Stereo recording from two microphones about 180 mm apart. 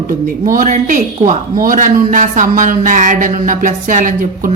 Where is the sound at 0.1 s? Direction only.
50° right (ahead or behind).